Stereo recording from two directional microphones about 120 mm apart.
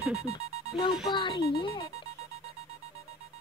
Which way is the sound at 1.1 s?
40° left (ahead or behind).